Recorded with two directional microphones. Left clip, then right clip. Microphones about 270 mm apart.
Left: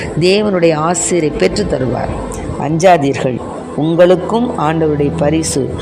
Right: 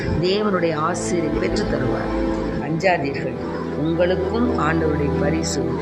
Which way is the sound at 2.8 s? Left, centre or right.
Left.